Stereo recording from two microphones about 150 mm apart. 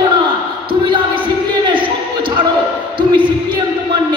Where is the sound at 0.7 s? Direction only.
35° right (ahead or behind).